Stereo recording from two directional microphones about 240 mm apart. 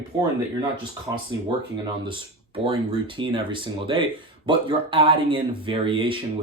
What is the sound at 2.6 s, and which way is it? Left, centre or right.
Speech, right.